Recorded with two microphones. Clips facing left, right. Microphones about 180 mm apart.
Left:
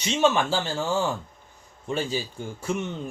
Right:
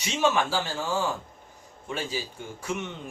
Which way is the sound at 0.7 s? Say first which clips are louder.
Left 3 dB; 25° left (ahead or behind).